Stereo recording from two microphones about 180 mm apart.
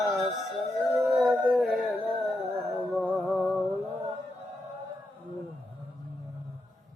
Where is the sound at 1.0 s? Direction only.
5° right (ahead or behind).